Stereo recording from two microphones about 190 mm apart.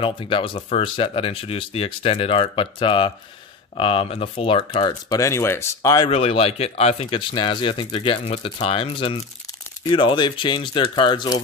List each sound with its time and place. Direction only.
0.0 s speech: 25° left (ahead or behind)
6.0 s speech: 30° left (ahead or behind)